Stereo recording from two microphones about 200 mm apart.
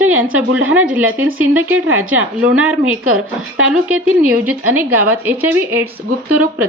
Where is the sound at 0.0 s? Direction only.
10° right (ahead or behind).